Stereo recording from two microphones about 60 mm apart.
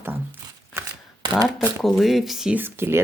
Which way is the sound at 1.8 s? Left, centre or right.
Centre.